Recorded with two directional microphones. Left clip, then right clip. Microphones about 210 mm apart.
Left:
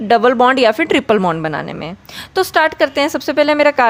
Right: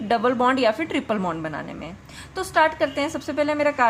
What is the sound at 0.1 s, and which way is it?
Speech, 40° left (ahead or behind).